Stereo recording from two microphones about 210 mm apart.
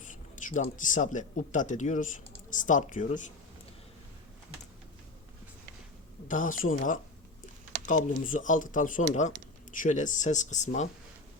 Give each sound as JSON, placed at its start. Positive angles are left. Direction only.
{"t": 0.1, "sound": "speech", "side_deg": 35}
{"t": 6.2, "sound": "speech", "side_deg": 40}